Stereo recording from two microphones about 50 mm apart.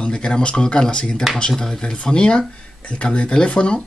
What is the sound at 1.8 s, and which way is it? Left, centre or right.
Speech, centre.